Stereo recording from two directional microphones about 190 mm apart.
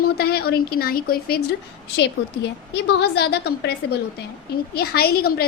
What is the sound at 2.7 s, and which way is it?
A woman's voice, 60° left (ahead or behind).